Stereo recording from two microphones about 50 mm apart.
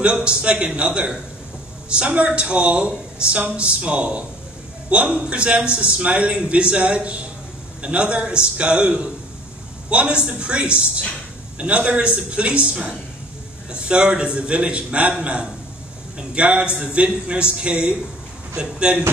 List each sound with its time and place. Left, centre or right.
0.0 s speech: centre